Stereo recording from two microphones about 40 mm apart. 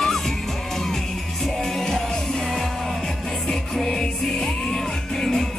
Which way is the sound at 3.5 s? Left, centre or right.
Centre.